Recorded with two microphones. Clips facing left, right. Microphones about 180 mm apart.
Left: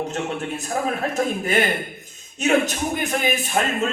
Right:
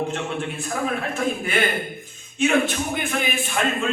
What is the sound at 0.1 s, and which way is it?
A man's voice, 40° left (ahead or behind).